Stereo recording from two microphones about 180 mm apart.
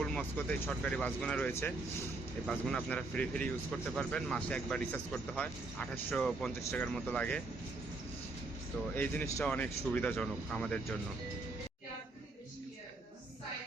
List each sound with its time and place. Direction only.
0.0 s speech: 5° left (ahead or behind)
9.0 s speech: 10° left (ahead or behind)